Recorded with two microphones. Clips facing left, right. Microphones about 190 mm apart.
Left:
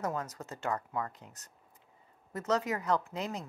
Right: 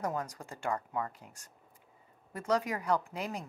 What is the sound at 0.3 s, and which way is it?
Speech, 15° right (ahead or behind).